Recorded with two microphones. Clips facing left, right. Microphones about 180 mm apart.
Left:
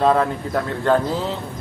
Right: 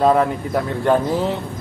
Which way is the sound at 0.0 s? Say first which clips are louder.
Right 2 dB; 10° right (ahead or behind).